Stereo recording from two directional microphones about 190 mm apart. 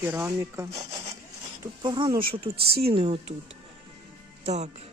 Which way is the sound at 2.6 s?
55° right (ahead or behind).